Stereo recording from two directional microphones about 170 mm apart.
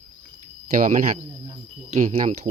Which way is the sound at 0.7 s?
50° right (ahead or behind).